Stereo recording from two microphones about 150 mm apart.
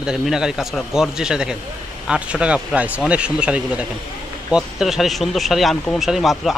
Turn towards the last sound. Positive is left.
turn(degrees=0)  # may be behind; listen again after turning